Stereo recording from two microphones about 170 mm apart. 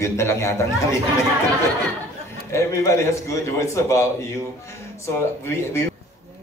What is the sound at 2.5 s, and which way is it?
A man's voice, 20° left (ahead or behind).